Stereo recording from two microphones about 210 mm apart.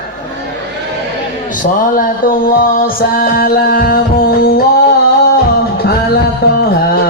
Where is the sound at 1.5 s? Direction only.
40° left (ahead or behind).